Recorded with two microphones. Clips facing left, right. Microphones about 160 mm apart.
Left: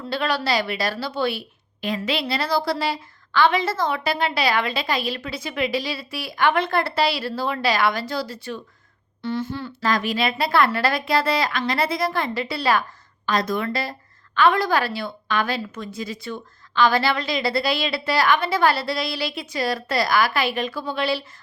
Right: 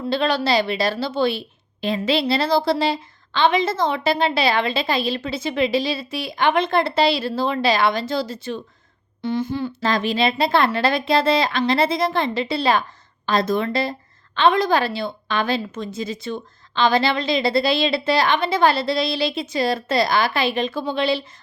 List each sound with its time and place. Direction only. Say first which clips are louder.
0.1 s a woman's voice: right 3 dB; 25° right (ahead or behind)